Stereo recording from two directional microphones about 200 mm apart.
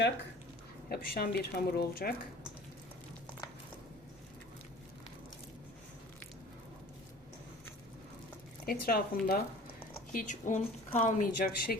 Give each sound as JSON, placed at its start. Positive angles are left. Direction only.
{"t": 0.9, "sound": "speech", "side_deg": 50}
{"t": 8.6, "sound": "speech", "side_deg": 50}